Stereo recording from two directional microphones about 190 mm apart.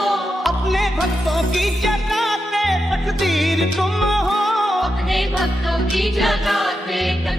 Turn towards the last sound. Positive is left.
turn(degrees=0)  # may be behind; listen again after turning